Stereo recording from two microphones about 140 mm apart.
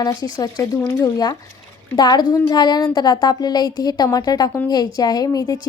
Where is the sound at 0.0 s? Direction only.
25° left (ahead or behind).